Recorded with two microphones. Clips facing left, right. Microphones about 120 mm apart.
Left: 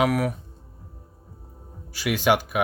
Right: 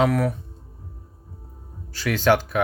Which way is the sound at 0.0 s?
10° left (ahead or behind).